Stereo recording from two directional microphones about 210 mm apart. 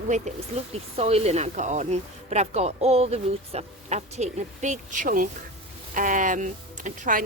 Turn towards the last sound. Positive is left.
turn(degrees=-40)  # may be behind; listen again after turning